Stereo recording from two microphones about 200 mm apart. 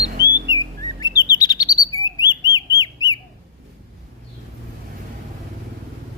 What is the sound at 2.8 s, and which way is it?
Bird, 20° left (ahead or behind).